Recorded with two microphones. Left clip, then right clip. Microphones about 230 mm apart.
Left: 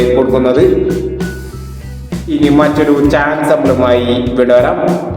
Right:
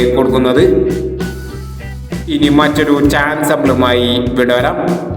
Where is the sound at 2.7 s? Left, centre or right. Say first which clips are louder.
Left 2 dB; right.